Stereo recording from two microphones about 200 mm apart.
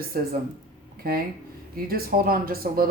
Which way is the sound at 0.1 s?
45° right (ahead or behind).